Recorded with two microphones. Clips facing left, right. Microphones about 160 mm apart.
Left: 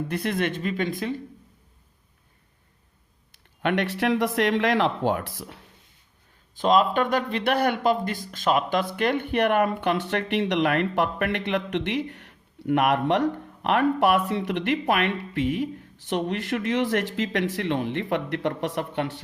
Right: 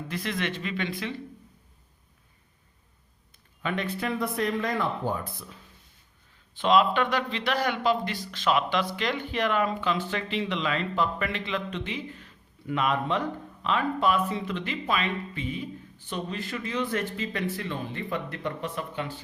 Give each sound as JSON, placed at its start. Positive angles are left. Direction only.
{"t": 0.1, "sound": "speech", "side_deg": 55}
{"t": 3.6, "sound": "speech", "side_deg": 70}
{"t": 6.6, "sound": "speech", "side_deg": 45}